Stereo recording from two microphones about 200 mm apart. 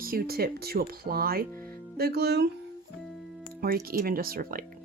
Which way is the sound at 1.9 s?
50° right (ahead or behind).